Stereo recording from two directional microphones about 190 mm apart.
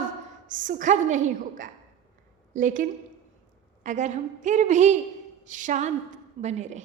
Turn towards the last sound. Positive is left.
turn(degrees=-35)  # may be behind; listen again after turning